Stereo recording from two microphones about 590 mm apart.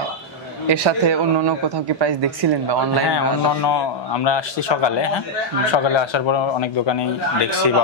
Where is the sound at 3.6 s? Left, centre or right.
Left.